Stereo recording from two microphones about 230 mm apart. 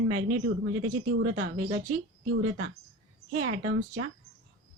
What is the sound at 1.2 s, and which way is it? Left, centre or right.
Speech, right.